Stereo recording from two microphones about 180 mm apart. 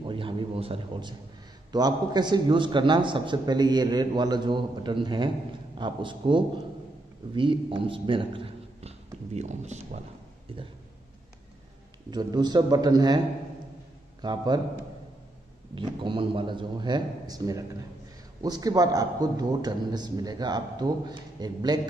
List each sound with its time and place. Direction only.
0.0 s a sound: 30° right (ahead or behind)
1.7 s a man's voice: 20° right (ahead or behind); by 10.0 s 40° right (ahead or behind)
12.1 s a man's voice: 25° right (ahead or behind)
14.2 s a man's voice: 25° right (ahead or behind)
15.7 s a man's voice: 25° right (ahead or behind)